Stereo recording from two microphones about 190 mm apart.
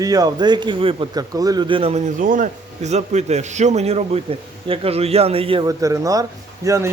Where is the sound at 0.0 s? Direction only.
20° right (ahead or behind).